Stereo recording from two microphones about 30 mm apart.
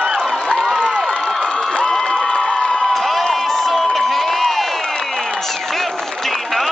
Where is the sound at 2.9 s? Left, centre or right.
Centre.